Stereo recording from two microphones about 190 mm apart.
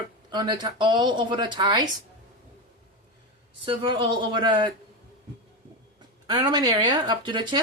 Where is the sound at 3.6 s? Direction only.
25° right (ahead or behind).